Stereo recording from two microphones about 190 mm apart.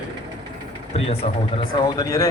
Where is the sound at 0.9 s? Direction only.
30° left (ahead or behind).